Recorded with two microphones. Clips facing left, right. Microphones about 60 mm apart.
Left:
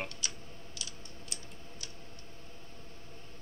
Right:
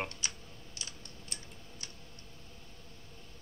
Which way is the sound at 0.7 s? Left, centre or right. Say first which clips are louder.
Even; right.